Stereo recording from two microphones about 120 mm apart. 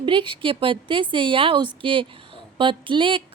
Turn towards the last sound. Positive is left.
turn(degrees=-45)  # may be behind; listen again after turning